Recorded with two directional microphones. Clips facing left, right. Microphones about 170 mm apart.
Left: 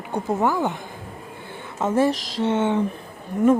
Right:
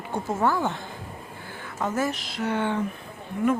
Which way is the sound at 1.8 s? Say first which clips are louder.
Left 7 dB; 30° left (ahead or behind).